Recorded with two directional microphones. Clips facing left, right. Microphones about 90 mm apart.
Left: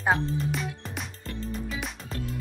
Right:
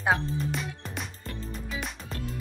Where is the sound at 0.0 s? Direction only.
Centre (ahead or behind).